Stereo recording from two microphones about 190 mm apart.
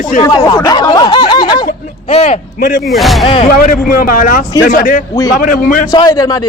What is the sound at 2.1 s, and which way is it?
Speech, 35° left (ahead or behind).